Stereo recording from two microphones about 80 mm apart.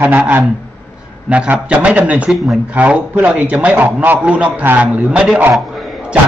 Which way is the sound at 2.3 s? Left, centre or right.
Centre.